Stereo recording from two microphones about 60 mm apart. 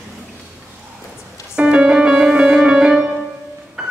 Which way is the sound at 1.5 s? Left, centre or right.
Centre.